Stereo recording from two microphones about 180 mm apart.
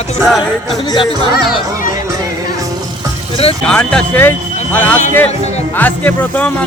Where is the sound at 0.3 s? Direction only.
Centre (ahead or behind).